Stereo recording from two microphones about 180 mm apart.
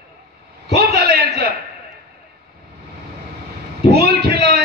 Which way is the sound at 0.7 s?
60° right (ahead or behind).